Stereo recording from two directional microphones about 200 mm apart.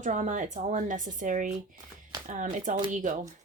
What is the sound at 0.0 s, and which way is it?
Speech, 40° right (ahead or behind).